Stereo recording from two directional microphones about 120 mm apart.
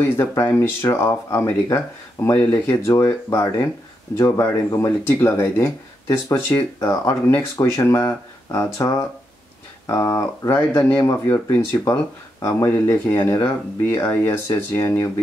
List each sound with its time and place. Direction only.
0.2 s speech: 20° left (ahead or behind)
7.2 s speech: 20° left (ahead or behind)